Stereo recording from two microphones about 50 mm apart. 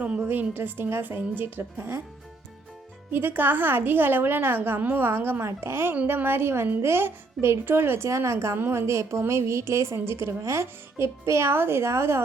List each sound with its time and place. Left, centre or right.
0.2 s a woman's voice: right
3.1 s a woman's voice: right
5.4 s a woman's voice: right
8.0 s a woman's voice: right
10.0 s speech: right